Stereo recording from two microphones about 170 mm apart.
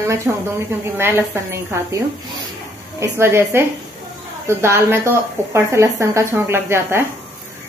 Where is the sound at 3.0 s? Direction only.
15° right (ahead or behind).